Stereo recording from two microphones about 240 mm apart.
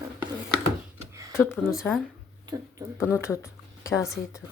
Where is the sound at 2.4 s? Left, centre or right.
Centre.